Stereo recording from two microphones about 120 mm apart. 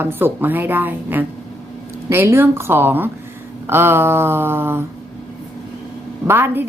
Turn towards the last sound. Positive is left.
turn(degrees=-15)  # may be behind; listen again after turning